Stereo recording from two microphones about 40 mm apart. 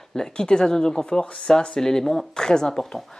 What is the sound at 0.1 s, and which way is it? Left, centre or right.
Speech, centre.